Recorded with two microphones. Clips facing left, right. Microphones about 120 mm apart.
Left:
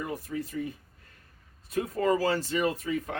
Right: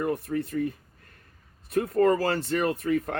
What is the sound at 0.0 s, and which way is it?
Speech, 60° right (ahead or behind).